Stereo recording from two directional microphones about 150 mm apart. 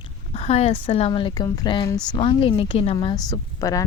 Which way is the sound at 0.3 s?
45° left (ahead or behind).